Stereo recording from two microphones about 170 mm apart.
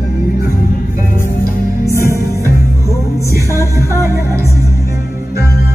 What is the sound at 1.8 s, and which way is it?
Music, 15° left (ahead or behind).